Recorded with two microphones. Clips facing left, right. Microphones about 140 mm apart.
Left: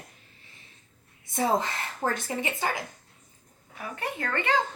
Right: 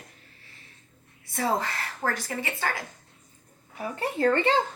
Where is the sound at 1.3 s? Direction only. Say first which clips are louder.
Left 1 dB; 20° left (ahead or behind).